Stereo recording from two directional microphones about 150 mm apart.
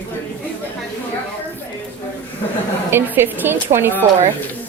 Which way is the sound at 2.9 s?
15° right (ahead or behind).